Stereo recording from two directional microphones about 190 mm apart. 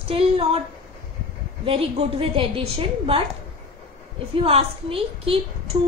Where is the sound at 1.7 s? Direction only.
30° right (ahead or behind).